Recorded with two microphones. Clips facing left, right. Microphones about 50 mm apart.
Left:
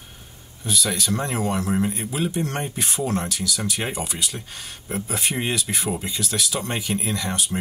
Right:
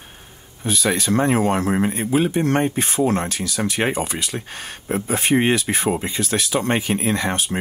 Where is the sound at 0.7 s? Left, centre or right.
Right.